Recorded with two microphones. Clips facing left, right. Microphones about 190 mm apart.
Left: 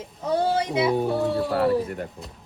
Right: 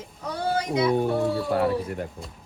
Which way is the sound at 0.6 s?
Centre (ahead or behind).